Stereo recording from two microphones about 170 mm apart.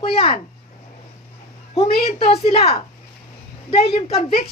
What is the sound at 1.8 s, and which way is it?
A woman's voice, 35° left (ahead or behind).